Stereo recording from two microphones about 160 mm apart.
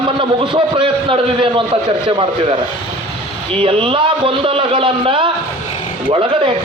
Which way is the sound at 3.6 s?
35° right (ahead or behind).